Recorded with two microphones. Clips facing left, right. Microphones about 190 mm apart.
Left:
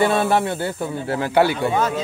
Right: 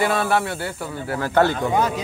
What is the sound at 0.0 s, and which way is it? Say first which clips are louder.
Speech: left 3 dB; 25° left (ahead or behind).